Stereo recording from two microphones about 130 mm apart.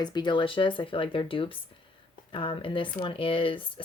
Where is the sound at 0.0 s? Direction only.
35° left (ahead or behind).